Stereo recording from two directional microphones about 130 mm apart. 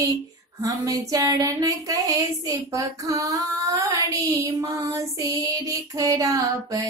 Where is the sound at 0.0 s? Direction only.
25° right (ahead or behind).